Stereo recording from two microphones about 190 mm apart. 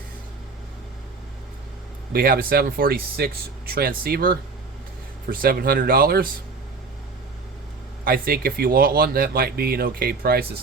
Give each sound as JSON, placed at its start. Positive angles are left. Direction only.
{"t": 2.1, "sound": "speech", "side_deg": -50}
{"t": 8.0, "sound": "speech", "side_deg": -50}